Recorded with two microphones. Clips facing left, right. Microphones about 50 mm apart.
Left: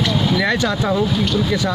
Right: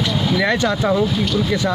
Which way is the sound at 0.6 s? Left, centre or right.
Centre.